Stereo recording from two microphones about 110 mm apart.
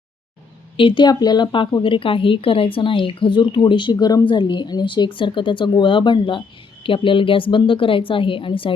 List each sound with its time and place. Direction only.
0.8 s a woman's voice: 50° left (ahead or behind)
3.9 s a woman's voice: 35° left (ahead or behind); by 8.7 s 50° left (ahead or behind)